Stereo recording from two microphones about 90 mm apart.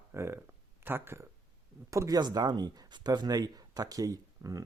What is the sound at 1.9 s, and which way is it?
Speech, 40° right (ahead or behind).